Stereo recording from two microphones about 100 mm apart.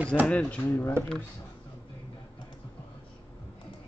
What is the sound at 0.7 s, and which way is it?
Speech, 20° left (ahead or behind).